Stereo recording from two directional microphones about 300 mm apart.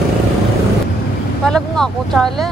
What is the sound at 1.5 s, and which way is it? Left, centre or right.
Speech, centre.